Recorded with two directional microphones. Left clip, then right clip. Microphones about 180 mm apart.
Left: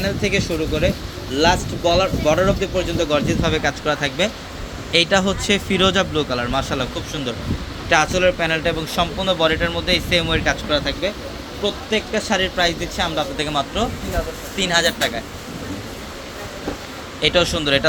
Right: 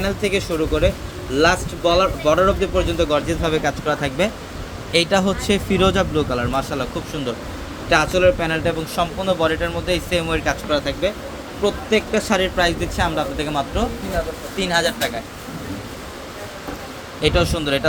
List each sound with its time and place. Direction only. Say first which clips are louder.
0.0 s a man's voice: even; 10° right (ahead or behind)
17.2 s a man's voice: left 2 dB; centre (ahead or behind)